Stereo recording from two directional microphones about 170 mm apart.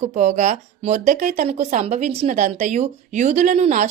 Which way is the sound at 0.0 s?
45° right (ahead or behind).